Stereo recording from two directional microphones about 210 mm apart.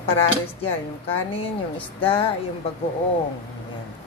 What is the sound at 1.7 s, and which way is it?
Speech, 5° left (ahead or behind).